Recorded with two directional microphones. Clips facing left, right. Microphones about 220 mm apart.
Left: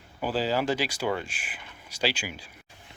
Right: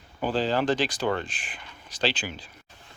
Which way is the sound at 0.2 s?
5° left (ahead or behind).